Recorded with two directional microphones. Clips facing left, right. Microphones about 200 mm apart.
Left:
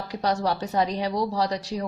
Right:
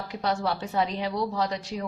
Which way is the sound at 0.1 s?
40° left (ahead or behind).